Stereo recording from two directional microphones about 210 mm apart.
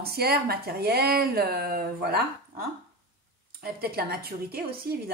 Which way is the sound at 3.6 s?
45° right (ahead or behind).